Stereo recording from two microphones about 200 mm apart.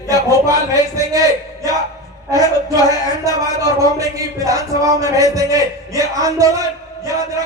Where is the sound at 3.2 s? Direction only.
15° right (ahead or behind).